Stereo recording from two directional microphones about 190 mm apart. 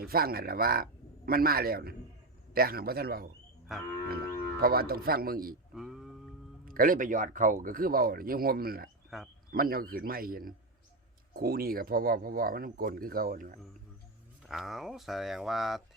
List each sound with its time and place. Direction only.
0.0 s speech: 55° right (ahead or behind)
3.7 s speech: centre (ahead or behind)
4.1 s speech: 55° right (ahead or behind)
5.7 s music: centre (ahead or behind)
6.7 s speech: 50° right (ahead or behind)
9.0 s speech: centre (ahead or behind)
9.5 s speech: 50° right (ahead or behind)
14.4 s speech: centre (ahead or behind)